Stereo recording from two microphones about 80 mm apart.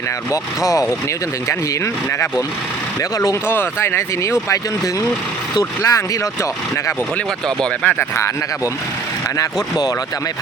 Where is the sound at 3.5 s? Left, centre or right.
Left.